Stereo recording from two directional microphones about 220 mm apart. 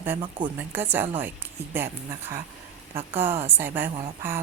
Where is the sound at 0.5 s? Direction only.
10° right (ahead or behind).